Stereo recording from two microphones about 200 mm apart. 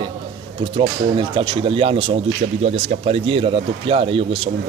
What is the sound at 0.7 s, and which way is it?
Speech, 25° right (ahead or behind).